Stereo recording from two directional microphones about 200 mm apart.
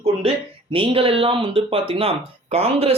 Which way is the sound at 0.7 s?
25° right (ahead or behind).